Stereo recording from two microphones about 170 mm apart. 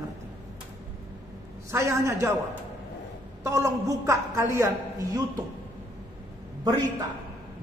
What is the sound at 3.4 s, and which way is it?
A woman's voice, 20° right (ahead or behind).